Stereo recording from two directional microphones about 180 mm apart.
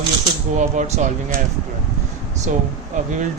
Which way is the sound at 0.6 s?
40° right (ahead or behind).